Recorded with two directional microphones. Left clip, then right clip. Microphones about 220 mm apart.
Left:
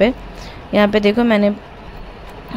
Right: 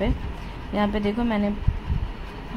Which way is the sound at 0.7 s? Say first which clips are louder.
Left 11 dB; 25° left (ahead or behind).